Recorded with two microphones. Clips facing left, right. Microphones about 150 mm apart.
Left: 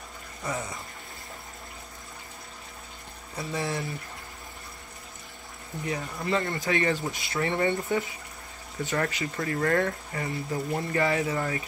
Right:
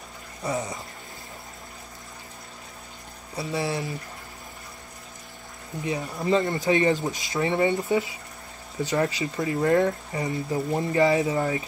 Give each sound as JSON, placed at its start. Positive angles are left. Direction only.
{"t": 0.4, "sound": "speech", "side_deg": -15}
{"t": 3.3, "sound": "speech", "side_deg": -15}
{"t": 5.9, "sound": "speech", "side_deg": -15}
{"t": 8.8, "sound": "speech", "side_deg": -15}